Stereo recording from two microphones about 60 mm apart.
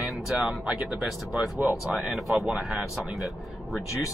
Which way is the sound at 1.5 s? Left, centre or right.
Right.